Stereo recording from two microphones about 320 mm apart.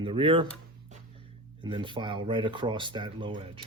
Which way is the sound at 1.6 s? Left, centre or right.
Centre.